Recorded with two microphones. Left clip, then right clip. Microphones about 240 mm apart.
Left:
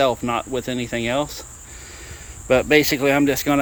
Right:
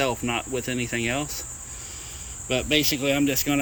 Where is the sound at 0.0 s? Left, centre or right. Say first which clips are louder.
Left 6 dB; centre.